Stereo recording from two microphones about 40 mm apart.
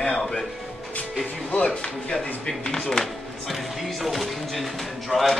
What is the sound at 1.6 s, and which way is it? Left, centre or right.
A man's voice, left.